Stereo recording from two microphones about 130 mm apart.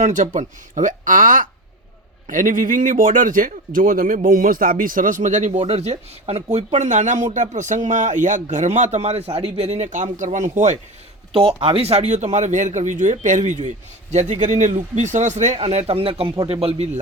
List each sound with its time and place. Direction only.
0.0 s a man's voice: 75° right (ahead or behind)
11.3 s a man's voice: 45° right (ahead or behind); by 15.5 s 65° right (ahead or behind)
15.5 s speech: 55° right (ahead or behind)